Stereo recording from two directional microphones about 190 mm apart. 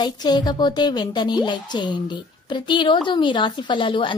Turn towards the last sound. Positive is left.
turn(degrees=25)  # may be behind; listen again after turning